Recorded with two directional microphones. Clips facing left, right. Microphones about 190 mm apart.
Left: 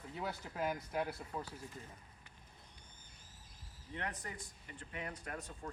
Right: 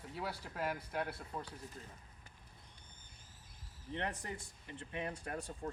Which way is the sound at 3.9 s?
30° right (ahead or behind).